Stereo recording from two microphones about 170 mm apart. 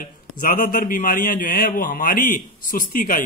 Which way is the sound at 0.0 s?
55° left (ahead or behind).